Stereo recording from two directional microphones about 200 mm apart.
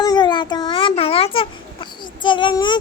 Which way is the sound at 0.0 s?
20° left (ahead or behind).